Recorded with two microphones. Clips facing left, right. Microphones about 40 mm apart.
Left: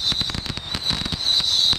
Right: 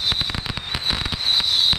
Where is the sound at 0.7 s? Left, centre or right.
Centre.